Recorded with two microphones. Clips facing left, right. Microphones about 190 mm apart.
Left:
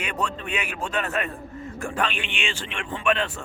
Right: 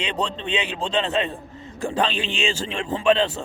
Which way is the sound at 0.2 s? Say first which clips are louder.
Right 3 dB; 30° right (ahead or behind).